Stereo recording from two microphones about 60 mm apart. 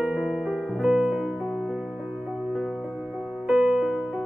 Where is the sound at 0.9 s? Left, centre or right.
Centre.